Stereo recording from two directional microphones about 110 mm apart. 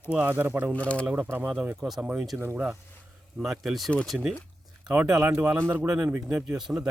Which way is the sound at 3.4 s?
Centre (ahead or behind).